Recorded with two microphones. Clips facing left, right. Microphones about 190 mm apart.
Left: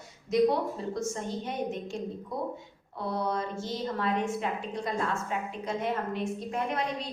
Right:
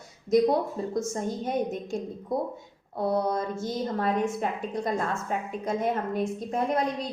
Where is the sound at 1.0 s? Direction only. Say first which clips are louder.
Right 4 dB; 45° right (ahead or behind).